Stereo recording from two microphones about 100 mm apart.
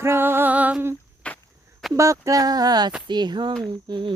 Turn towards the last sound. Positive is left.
turn(degrees=-50)  # may be behind; listen again after turning